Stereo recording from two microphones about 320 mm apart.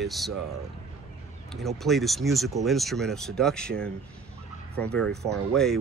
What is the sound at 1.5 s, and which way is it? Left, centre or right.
Speech, centre.